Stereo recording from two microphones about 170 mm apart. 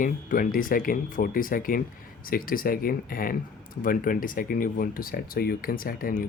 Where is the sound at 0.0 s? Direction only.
55° left (ahead or behind).